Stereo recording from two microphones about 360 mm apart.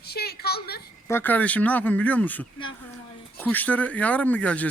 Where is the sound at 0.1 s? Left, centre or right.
Left.